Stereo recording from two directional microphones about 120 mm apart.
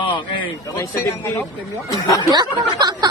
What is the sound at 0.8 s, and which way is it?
Speech, 20° left (ahead or behind).